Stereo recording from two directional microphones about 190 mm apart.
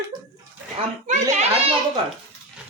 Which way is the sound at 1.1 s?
40° right (ahead or behind).